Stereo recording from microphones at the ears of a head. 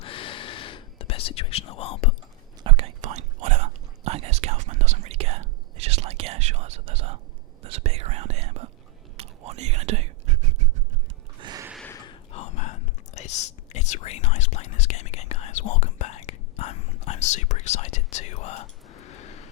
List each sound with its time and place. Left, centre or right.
0.0 s whispering: left
2.6 s whispering: right
7.6 s speech: right
9.1 s whispering: right
11.3 s music: right
11.9 s whispering: left